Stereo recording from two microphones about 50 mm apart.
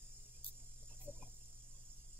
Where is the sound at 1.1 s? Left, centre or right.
Right.